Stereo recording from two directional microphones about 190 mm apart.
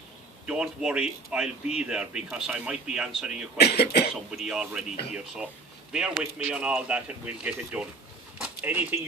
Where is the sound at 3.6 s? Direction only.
60° left (ahead or behind).